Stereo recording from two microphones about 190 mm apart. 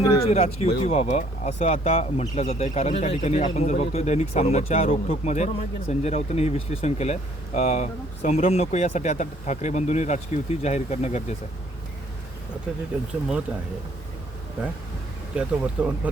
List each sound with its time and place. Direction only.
0.2 s speech: 35° left (ahead or behind)
15.4 s speech: 5° right (ahead or behind)